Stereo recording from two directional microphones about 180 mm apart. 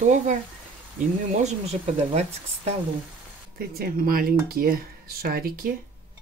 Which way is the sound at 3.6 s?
55° right (ahead or behind).